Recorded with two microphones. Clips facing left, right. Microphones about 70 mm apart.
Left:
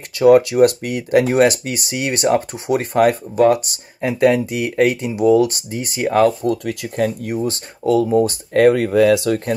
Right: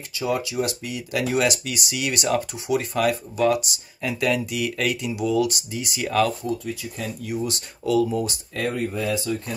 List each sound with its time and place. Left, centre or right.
0.2 s speech: left
6.4 s speech: left
7.3 s speech: left
8.5 s speech: left